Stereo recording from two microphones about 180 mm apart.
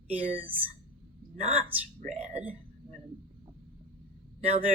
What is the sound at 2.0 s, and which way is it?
Speech, 40° right (ahead or behind).